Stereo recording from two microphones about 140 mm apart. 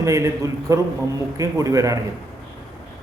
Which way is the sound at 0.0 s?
20° right (ahead or behind).